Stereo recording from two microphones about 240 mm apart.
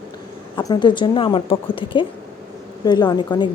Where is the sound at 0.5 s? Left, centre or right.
Centre.